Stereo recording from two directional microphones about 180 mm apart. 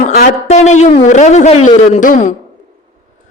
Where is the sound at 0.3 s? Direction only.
40° left (ahead or behind).